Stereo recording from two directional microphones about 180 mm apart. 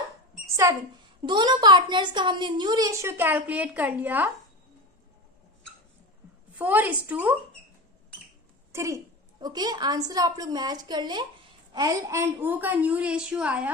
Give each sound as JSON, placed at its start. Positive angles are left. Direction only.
{"t": 0.5, "sound": "a sound", "side_deg": -15}
{"t": 1.2, "sound": "a woman's voice", "side_deg": -25}
{"t": 6.6, "sound": "a woman's voice", "side_deg": -10}
{"t": 8.7, "sound": "a woman's voice", "side_deg": -15}